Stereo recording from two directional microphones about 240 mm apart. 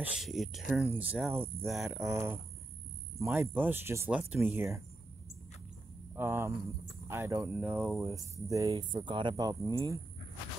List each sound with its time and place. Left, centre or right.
0.2 s speech: centre
6.1 s speech: centre